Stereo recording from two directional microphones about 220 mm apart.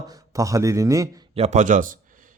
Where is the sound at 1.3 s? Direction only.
30° right (ahead or behind).